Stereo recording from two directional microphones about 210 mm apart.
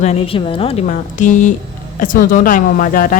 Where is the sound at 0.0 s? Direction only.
30° left (ahead or behind).